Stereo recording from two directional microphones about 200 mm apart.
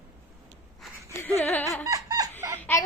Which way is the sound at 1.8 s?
15° right (ahead or behind).